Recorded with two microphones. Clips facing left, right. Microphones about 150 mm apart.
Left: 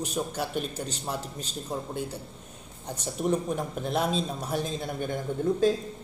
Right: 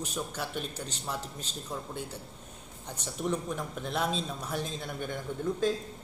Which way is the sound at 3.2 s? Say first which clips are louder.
Left 5 dB; 35° left (ahead or behind).